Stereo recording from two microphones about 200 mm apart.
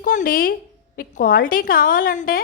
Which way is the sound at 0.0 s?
40° left (ahead or behind).